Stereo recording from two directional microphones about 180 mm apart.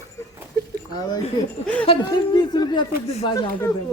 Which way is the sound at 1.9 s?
25° left (ahead or behind).